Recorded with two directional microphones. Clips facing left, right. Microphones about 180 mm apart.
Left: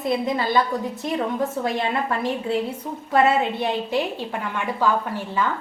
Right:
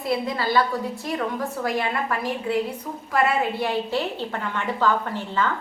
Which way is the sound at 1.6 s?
25° left (ahead or behind).